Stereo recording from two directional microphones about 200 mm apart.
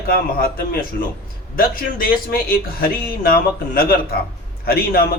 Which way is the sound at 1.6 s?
45° left (ahead or behind).